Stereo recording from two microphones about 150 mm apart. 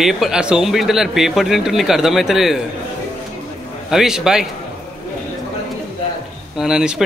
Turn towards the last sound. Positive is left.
turn(degrees=-5)  # may be behind; listen again after turning